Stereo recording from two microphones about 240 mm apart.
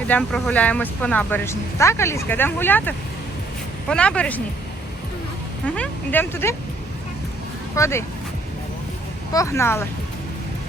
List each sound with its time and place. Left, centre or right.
0.1 s speech: centre
5.6 s speech: centre
7.8 s speech: centre
9.3 s speech: centre